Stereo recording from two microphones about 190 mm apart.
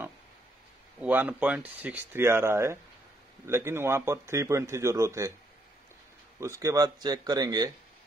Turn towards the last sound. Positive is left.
turn(degrees=-20)  # may be behind; listen again after turning